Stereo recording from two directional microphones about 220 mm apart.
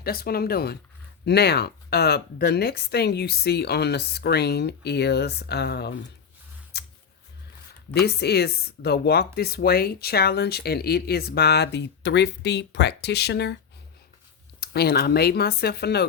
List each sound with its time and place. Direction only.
0.0 s speech: 45° left (ahead or behind)
6.7 s a sound: 50° left (ahead or behind)
8.0 s speech: 45° left (ahead or behind)
14.6 s speech: 45° left (ahead or behind)